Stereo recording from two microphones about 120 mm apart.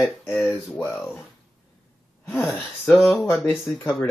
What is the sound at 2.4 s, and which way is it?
Speech, 5° left (ahead or behind).